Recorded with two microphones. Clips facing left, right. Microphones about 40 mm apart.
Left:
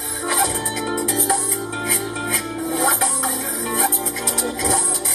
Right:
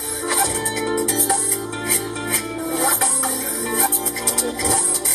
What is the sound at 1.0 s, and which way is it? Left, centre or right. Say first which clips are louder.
Music: even; left.